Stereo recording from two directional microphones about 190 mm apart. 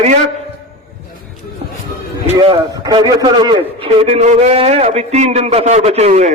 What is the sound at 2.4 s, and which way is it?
A man's voice, 20° right (ahead or behind).